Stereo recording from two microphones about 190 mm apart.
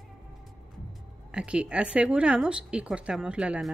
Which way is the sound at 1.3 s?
5° right (ahead or behind).